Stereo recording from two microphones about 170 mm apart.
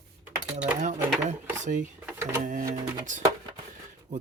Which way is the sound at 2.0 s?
15° right (ahead or behind).